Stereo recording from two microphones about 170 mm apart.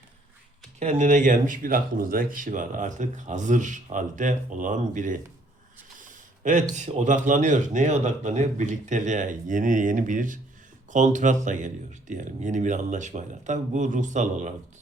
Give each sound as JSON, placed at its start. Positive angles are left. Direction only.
{"t": 0.8, "sound": "speech", "side_deg": -40}